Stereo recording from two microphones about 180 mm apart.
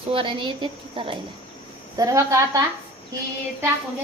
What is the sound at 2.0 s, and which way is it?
Speech, 15° right (ahead or behind).